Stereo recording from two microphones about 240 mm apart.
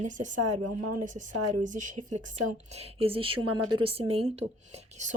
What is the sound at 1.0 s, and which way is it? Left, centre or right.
A woman's voice, right.